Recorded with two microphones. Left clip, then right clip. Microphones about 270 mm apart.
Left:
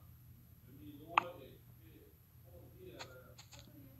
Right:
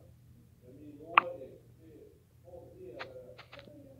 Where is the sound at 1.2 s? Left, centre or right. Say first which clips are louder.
Right 8 dB; centre.